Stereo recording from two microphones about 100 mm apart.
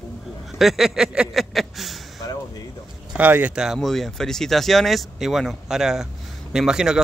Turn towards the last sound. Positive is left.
turn(degrees=-5)  # may be behind; listen again after turning